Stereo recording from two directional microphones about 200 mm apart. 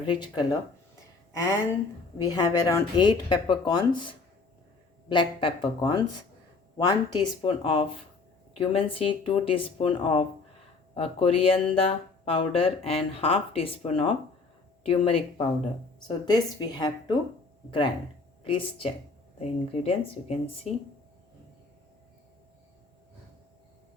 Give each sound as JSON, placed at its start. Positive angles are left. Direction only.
{"t": 0.1, "sound": "speech", "side_deg": 25}